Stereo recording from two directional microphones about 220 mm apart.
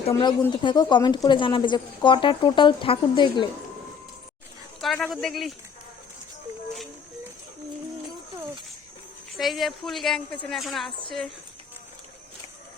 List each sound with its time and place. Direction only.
0.1 s speech: 15° left (ahead or behind)
4.8 s a woman's voice: centre (ahead or behind)
9.4 s a woman's voice: centre (ahead or behind)